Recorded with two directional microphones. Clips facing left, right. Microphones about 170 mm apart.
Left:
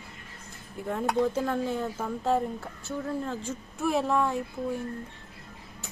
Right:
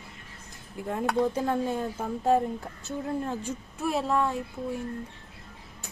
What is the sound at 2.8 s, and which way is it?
Speech, 15° right (ahead or behind).